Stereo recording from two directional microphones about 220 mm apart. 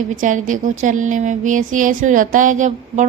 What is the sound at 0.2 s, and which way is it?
Speech, 35° right (ahead or behind).